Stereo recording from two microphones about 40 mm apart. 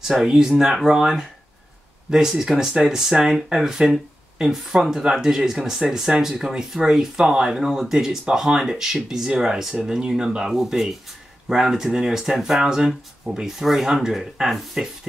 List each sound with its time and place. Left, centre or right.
0.2 s speech: centre